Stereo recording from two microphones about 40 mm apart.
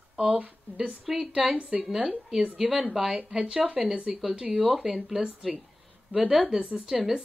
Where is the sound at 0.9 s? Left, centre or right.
Centre.